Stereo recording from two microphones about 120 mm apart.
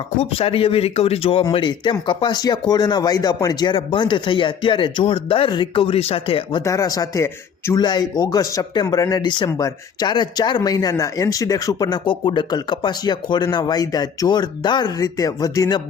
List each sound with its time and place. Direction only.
0.2 s speech: 55° left (ahead or behind)
1.5 s speech: 40° left (ahead or behind)
6.7 s speech: 30° left (ahead or behind)